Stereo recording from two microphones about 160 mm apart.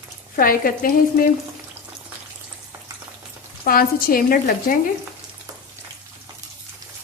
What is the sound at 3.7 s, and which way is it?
Speech, 65° left (ahead or behind).